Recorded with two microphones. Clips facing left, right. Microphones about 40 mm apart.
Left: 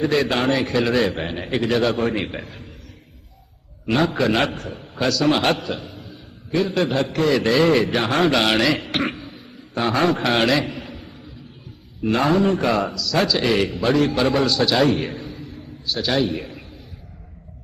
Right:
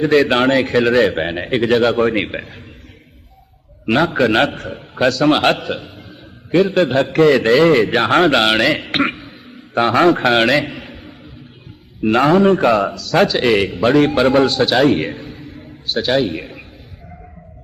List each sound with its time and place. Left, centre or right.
0.0 s a man's voice: right
3.8 s a man's voice: right